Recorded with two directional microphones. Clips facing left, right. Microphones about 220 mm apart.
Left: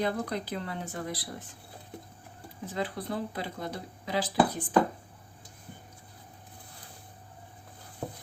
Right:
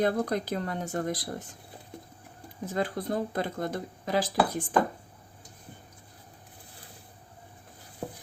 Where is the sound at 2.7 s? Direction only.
45° right (ahead or behind).